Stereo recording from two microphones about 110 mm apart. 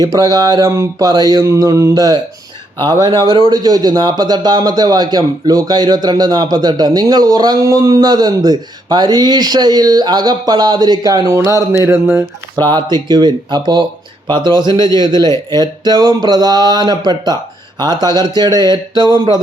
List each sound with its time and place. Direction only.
0.0 s speech: 35° right (ahead or behind)
12.6 s speech: 40° right (ahead or behind)
14.7 s a man's voice: 30° left (ahead or behind)
14.9 s speech: 45° right (ahead or behind)